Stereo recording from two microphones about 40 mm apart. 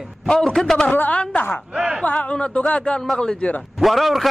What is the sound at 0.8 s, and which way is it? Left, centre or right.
Speech, left.